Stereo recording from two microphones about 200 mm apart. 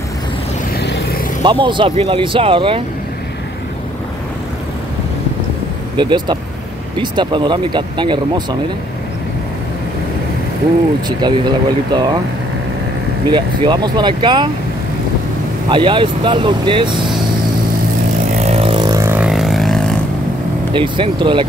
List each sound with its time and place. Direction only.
0.7 s vehicle: 55° left (ahead or behind)
1.4 s speech: 25° right (ahead or behind)
5.9 s speech: 25° right (ahead or behind)
11.1 s speech: 20° right (ahead or behind)
13.3 s speech: 20° right (ahead or behind)
15.7 s speech: 25° right (ahead or behind)
18.4 s vehicle: 30° right (ahead or behind); by 19.8 s centre (ahead or behind)
20.7 s speech: 25° right (ahead or behind)